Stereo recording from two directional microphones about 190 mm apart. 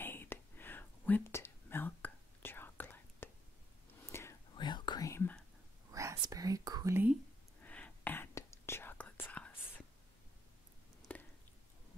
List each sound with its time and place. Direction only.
0.0 s whispering: 10° left (ahead or behind)
4.6 s whispering: 25° left (ahead or behind)
5.9 s whispering: 15° right (ahead or behind)
7.6 s whispering: 10° left (ahead or behind)
11.1 s a sound: 5° left (ahead or behind)